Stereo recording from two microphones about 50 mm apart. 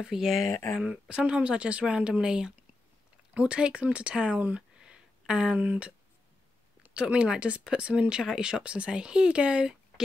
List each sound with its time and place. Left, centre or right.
0.0 s speech: centre
0.5 s speech: left
0.8 s speech: centre
4.6 s a sound: centre
5.6 s speech: right